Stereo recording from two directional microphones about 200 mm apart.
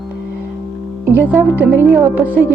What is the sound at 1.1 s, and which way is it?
Speech, 10° right (ahead or behind).